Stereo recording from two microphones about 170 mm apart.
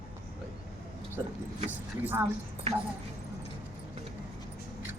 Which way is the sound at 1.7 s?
10° right (ahead or behind).